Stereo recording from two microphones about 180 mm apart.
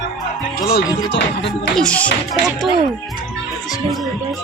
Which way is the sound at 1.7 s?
5° left (ahead or behind).